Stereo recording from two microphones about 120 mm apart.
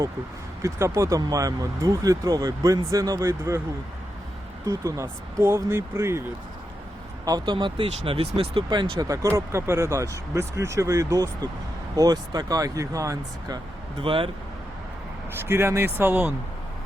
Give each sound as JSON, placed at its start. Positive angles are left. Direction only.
{"t": 0.6, "sound": "speech", "side_deg": -25}
{"t": 4.6, "sound": "speech", "side_deg": -25}
{"t": 7.3, "sound": "speech", "side_deg": -40}
{"t": 8.7, "sound": "speech", "side_deg": -40}
{"t": 9.0, "sound": "speech", "side_deg": -25}
{"t": 14.0, "sound": "speech", "side_deg": -45}
{"t": 15.4, "sound": "speech", "side_deg": -20}